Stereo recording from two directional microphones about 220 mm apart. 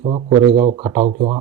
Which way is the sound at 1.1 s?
30° right (ahead or behind).